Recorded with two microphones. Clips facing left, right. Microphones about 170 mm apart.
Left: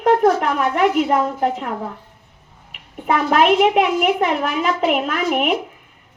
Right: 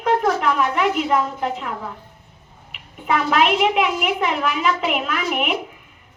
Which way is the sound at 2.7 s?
50° left (ahead or behind).